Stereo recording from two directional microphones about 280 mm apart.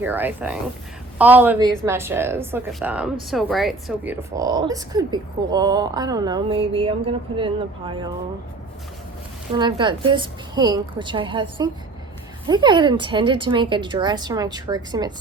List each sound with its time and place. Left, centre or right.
0.0 s a woman's voice: centre
9.5 s a woman's voice: centre